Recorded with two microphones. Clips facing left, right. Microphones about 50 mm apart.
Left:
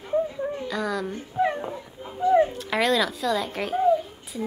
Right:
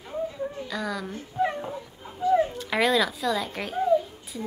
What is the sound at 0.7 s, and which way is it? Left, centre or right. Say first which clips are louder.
Speech: left 4 dB; centre.